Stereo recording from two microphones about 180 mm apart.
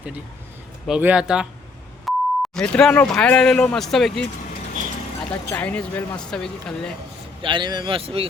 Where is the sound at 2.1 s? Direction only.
Centre (ahead or behind).